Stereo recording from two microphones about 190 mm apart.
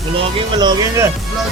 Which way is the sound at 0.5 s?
20° right (ahead or behind).